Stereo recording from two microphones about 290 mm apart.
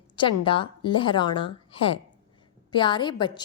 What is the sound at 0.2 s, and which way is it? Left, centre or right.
A woman's voice, centre.